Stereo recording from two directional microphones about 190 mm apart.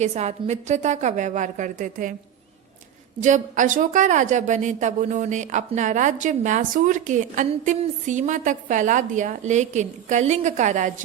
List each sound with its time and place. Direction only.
0.0 s a woman's voice: 35° right (ahead or behind)
3.2 s a woman's voice: 40° right (ahead or behind)